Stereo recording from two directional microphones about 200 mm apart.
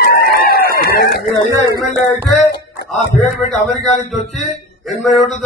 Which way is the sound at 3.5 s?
Centre (ahead or behind).